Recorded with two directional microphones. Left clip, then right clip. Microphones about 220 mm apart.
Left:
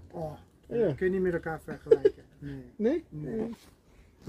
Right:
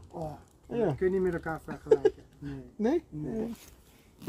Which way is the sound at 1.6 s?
35° right (ahead or behind).